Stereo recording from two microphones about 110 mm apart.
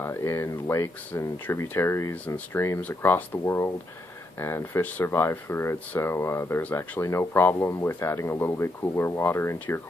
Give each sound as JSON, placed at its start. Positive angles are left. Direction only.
{"t": 0.0, "sound": "speech", "side_deg": 25}
{"t": 2.2, "sound": "speech", "side_deg": 15}